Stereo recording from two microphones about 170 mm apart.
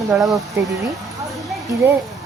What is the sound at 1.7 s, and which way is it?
Speech, 20° right (ahead or behind).